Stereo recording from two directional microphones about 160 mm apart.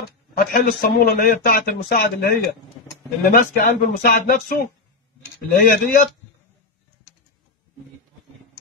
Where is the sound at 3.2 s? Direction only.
55° left (ahead or behind).